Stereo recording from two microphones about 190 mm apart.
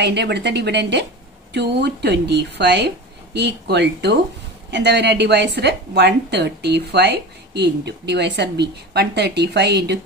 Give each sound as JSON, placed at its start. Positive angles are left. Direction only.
{"t": 0.0, "sound": "a woman's voice", "side_deg": -65}